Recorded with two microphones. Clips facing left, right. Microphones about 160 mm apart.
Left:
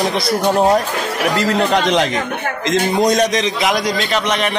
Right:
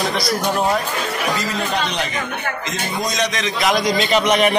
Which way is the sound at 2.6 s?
80° left.